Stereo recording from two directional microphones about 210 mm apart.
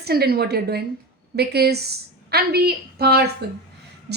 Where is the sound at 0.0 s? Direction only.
50° right (ahead or behind).